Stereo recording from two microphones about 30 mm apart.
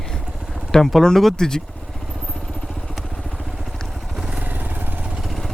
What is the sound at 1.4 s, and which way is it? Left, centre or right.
Speech, left.